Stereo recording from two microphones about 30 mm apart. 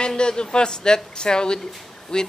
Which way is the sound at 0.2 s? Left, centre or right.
Left.